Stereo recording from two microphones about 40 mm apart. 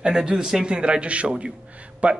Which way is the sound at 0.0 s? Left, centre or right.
Centre.